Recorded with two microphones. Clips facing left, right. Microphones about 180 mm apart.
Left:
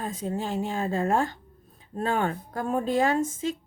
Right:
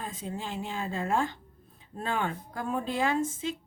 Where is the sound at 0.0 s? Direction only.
45° left (ahead or behind).